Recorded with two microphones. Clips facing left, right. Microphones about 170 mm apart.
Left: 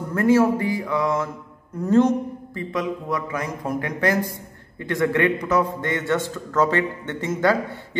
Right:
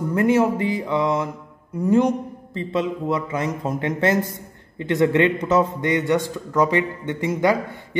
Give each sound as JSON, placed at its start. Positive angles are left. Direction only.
{"t": 0.1, "sound": "a man's voice", "side_deg": -20}
{"t": 2.5, "sound": "a man's voice", "side_deg": -25}